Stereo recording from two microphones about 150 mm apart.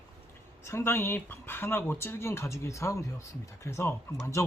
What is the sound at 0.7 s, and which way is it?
Speech, 15° left (ahead or behind).